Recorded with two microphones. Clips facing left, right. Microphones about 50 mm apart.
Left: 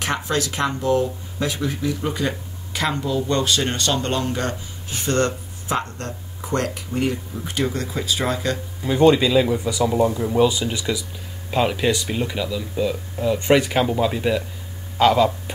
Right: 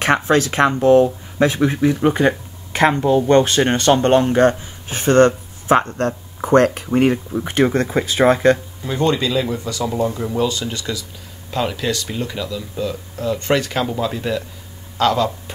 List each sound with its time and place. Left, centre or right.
0.0 s speech: right
8.8 s speech: centre